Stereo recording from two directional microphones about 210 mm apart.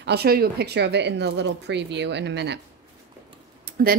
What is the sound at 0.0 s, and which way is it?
Speech, 50° right (ahead or behind).